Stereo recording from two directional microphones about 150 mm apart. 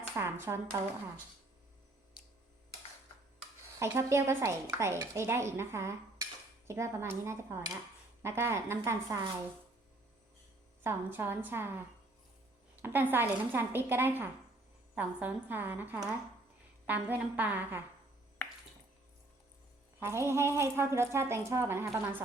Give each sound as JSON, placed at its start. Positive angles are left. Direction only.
{"t": 0.2, "sound": "speech", "side_deg": -15}
{"t": 3.8, "sound": "speech", "side_deg": -20}
{"t": 6.7, "sound": "cutlery", "side_deg": -20}
{"t": 8.2, "sound": "speech", "side_deg": -15}
{"t": 10.8, "sound": "speech", "side_deg": -15}
{"t": 12.8, "sound": "speech", "side_deg": -15}
{"t": 20.0, "sound": "speech", "side_deg": -15}